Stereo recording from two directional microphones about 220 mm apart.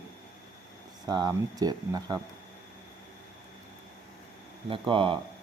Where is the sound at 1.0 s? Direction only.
20° right (ahead or behind).